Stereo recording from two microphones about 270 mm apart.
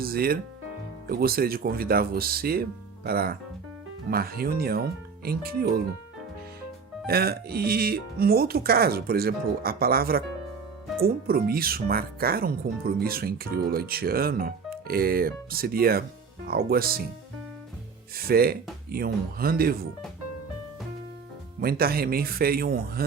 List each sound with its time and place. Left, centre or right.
0.0 s speech: right
7.1 s speech: right
18.2 s speech: right
21.6 s speech: right